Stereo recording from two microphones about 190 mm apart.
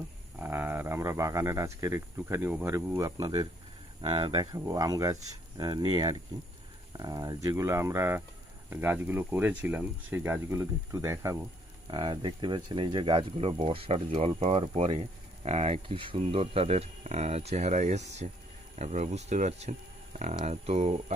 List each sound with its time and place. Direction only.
0.3 s speech: 10° right (ahead or behind); by 20.9 s 35° right (ahead or behind)